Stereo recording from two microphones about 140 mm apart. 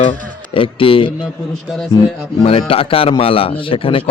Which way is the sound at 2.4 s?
40° left (ahead or behind).